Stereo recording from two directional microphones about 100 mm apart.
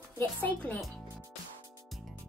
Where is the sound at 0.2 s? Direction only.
15° left (ahead or behind).